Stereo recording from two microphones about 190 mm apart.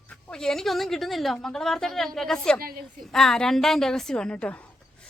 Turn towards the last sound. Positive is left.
turn(degrees=5)  # may be behind; listen again after turning